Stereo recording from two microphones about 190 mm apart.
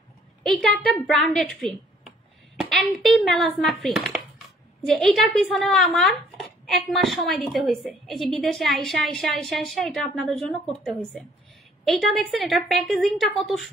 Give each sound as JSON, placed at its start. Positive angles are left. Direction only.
{"t": 0.4, "sound": "a woman's voice", "side_deg": 0}